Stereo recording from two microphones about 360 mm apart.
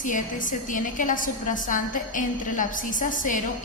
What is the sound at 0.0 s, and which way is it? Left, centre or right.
A woman's voice, left.